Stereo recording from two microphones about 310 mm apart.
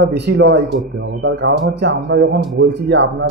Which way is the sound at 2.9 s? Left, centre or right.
Right.